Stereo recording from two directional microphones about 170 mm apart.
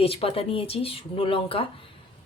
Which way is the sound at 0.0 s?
35° left (ahead or behind).